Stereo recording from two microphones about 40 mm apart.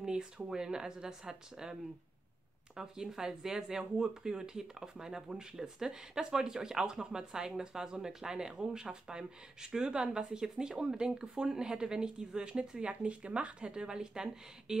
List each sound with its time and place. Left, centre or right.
0.0 s speech: centre